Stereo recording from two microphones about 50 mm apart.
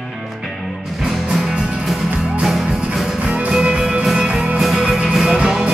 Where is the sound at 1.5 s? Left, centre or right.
Centre.